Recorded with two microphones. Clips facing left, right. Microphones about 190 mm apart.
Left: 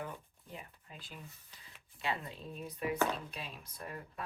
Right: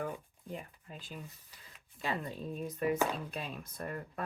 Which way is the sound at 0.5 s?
45° right (ahead or behind).